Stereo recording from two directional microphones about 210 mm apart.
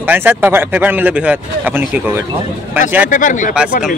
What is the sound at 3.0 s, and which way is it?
Speech, 40° left (ahead or behind).